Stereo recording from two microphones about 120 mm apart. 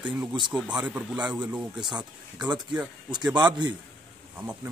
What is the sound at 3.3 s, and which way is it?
Speech, 35° right (ahead or behind).